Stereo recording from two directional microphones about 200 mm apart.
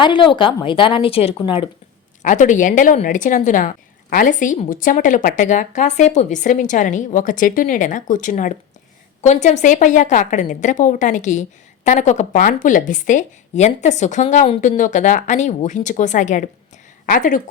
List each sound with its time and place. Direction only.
0.0 s speech: 25° left (ahead or behind)
2.2 s a woman's voice: 40° left (ahead or behind)